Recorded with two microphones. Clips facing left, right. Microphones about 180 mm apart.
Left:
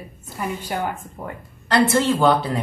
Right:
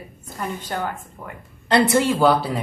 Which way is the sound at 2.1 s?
5° right (ahead or behind).